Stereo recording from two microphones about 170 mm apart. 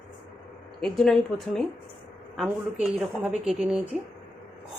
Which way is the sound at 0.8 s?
5° left (ahead or behind).